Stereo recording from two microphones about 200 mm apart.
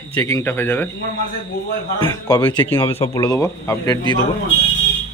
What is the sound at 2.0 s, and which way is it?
Speech, 20° left (ahead or behind).